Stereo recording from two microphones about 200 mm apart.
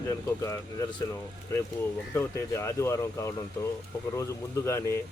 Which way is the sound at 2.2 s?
15° left (ahead or behind).